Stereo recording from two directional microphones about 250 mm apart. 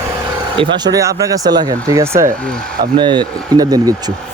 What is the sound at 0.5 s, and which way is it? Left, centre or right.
Speech, centre.